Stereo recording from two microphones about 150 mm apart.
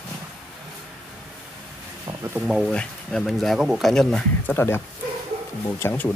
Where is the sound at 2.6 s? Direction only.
5° left (ahead or behind).